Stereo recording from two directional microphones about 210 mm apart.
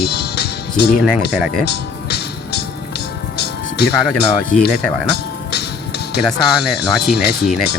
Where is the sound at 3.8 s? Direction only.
50° left (ahead or behind).